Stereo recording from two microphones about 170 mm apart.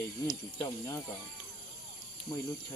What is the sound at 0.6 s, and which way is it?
Speech, 15° left (ahead or behind).